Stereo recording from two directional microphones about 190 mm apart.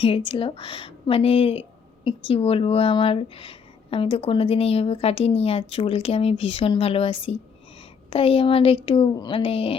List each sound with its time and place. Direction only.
0.3 s speech: 30° left (ahead or behind)